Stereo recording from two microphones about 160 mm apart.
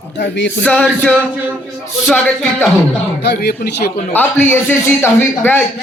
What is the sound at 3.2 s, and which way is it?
Speech, 85° left.